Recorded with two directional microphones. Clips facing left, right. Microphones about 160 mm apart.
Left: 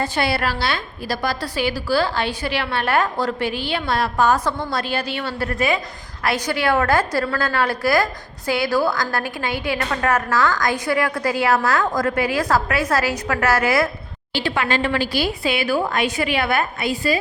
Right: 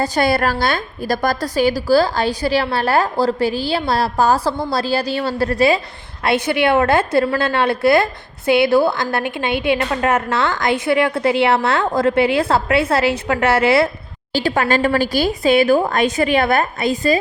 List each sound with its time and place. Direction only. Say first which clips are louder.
0.0 s a woman's voice: right 5 dB; 40° right (ahead or behind)
14.3 s a woman's voice: right 4 dB; 40° right (ahead or behind)